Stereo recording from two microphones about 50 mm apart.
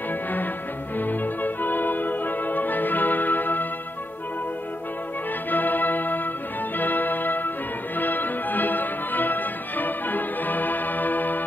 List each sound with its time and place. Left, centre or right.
0.9 s music: left
5.5 s organ: left
6.8 s music: left